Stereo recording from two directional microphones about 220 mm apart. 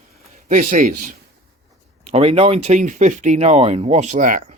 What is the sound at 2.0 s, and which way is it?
Speech, 30° right (ahead or behind).